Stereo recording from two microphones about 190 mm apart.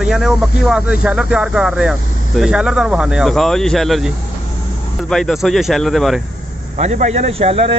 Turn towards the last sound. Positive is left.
turn(degrees=-30)  # may be behind; listen again after turning